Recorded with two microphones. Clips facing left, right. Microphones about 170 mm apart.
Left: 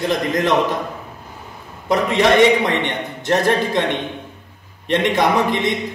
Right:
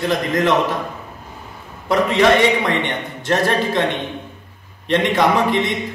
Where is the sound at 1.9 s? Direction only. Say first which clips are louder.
Right 1 dB; 15° left (ahead or behind).